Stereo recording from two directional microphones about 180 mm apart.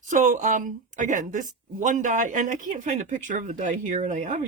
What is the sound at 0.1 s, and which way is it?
Speech, 45° right (ahead or behind).